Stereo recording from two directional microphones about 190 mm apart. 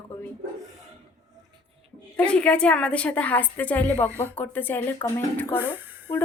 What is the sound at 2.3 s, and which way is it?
A woman's voice, 5° left (ahead or behind).